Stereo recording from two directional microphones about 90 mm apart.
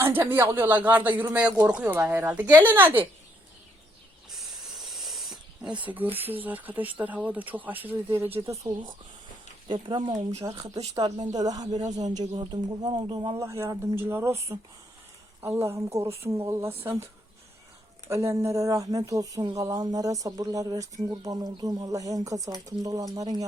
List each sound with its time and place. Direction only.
0.0 s speech: 20° right (ahead or behind)
4.3 s hiss: centre (ahead or behind)
5.8 s speech: 20° right (ahead or behind)
8.7 s speech: 35° right (ahead or behind)
9.6 s speech: 60° right (ahead or behind)
10.6 s a woman's voice: 45° right (ahead or behind); by 13.4 s 65° right (ahead or behind)
13.4 s speech: 35° right (ahead or behind)
18.1 s a woman's voice: 35° right (ahead or behind)